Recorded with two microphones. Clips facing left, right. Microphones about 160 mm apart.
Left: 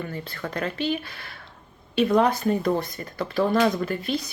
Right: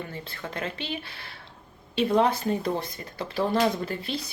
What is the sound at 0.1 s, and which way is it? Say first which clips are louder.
Speech: left 4 dB; 25° right (ahead or behind).